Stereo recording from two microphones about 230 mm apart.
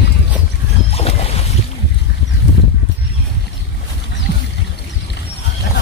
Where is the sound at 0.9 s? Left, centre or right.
Left.